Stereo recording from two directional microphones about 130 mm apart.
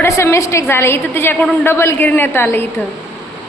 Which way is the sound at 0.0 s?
20° left (ahead or behind).